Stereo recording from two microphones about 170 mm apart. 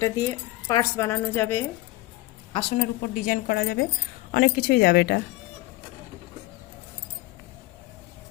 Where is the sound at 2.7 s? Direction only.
55° left (ahead or behind).